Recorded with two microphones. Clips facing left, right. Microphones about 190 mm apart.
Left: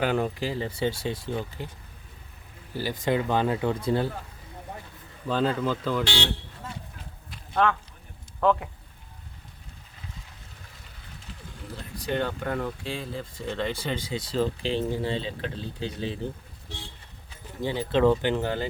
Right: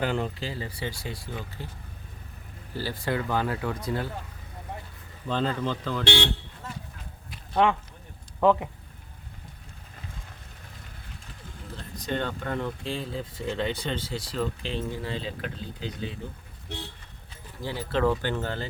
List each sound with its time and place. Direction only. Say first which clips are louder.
0.0 s speech: left 3 dB; 10° left (ahead or behind)
2.7 s speech: left 3 dB; 15° left (ahead or behind)
5.3 s speech: left 2 dB; 5° left (ahead or behind)
7.5 s speech: right 1 dB; 15° right (ahead or behind)
11.9 s speech: left 2 dB; 10° left (ahead or behind)
14.0 s speech: left 3 dB; 20° left (ahead or behind)
17.6 s speech: left 4 dB; 20° left (ahead or behind)